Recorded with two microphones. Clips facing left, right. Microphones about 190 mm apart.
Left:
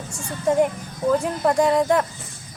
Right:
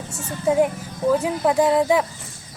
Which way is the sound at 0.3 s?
5° right (ahead or behind).